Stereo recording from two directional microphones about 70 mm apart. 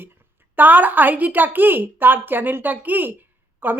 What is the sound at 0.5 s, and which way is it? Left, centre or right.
A woman's voice, right.